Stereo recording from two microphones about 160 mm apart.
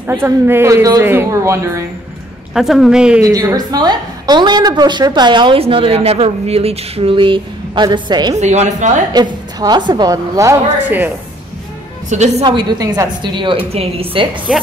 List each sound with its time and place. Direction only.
0.0 s a woman's voice: 15° right (ahead or behind)
2.5 s a woman's voice: centre (ahead or behind)
3.2 s a woman's voice: 20° right (ahead or behind)
8.4 s a woman's voice: 45° right (ahead or behind)
9.1 s a woman's voice: 25° right (ahead or behind)
12.1 s a woman's voice: 45° right (ahead or behind)
12.4 s a woman's voice: 25° right (ahead or behind)